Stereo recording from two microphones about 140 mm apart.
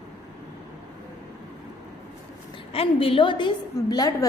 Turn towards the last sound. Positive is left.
turn(degrees=25)  # may be behind; listen again after turning